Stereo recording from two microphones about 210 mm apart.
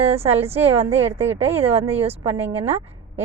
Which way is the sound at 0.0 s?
30° right (ahead or behind).